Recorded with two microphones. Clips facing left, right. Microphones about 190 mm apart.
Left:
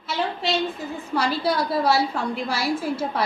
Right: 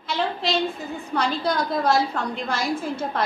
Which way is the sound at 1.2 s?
5° left (ahead or behind).